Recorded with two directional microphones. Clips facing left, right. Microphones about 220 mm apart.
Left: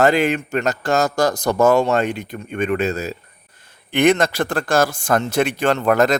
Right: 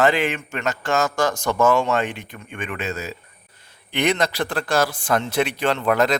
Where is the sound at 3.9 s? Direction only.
50° left (ahead or behind).